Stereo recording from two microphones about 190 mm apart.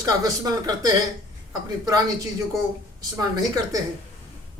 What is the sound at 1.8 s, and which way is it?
Speech, 20° right (ahead or behind).